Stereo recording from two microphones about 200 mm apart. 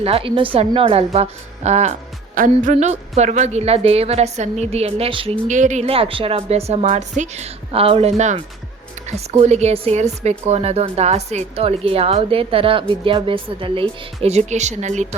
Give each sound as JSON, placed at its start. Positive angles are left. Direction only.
{"t": 0.0, "sound": "speech", "side_deg": -30}